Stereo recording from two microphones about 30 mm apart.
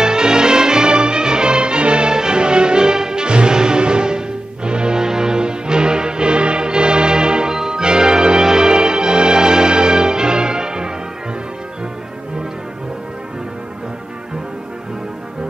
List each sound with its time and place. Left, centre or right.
0.0 s music: right